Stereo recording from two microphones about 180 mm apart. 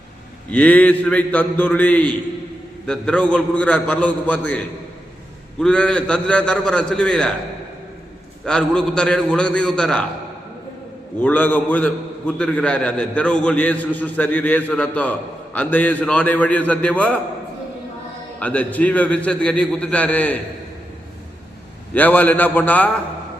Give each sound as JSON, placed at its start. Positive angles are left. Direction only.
{"t": 0.5, "sound": "a man's voice", "side_deg": 10}
{"t": 8.4, "sound": "a man's voice", "side_deg": 5}
{"t": 11.2, "sound": "a man's voice", "side_deg": 10}
{"t": 18.3, "sound": "a man's voice", "side_deg": 10}
{"t": 21.9, "sound": "a man's voice", "side_deg": 10}